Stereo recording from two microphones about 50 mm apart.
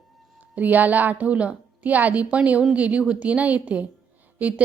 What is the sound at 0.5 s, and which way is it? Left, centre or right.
A woman's voice, right.